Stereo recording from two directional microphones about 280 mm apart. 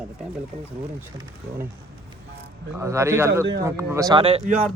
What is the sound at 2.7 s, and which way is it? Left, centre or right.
Speech, centre.